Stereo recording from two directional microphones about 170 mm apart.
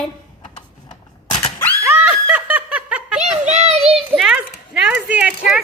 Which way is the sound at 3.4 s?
40° right (ahead or behind).